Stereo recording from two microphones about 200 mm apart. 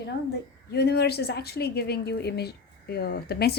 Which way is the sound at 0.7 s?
55° left (ahead or behind).